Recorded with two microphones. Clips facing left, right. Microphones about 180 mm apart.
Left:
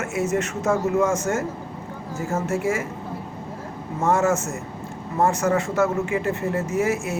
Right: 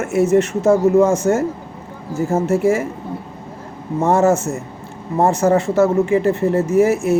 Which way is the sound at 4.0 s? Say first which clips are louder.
Right 6 dB; 35° right (ahead or behind).